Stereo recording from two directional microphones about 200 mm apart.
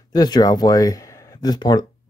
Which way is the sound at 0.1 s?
20° left (ahead or behind).